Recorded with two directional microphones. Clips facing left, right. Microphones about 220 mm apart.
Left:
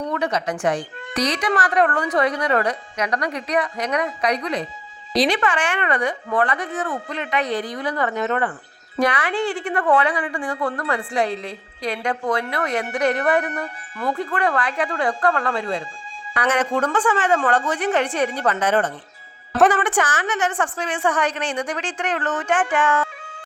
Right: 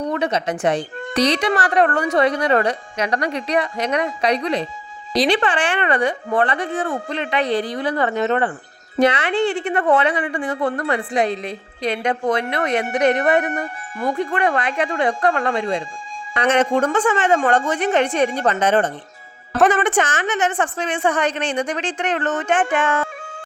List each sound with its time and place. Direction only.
0.1 s a woman's voice: 25° right (ahead or behind)